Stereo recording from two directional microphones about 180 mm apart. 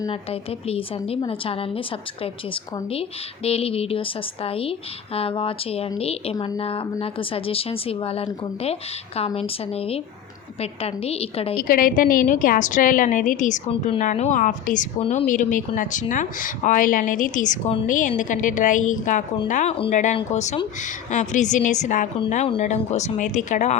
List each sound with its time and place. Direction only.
0.1 s speech: 30° left (ahead or behind)
6.3 s speech: 20° left (ahead or behind)
6.6 s speech: 30° left (ahead or behind)
11.5 s a woman's voice: 55° left (ahead or behind)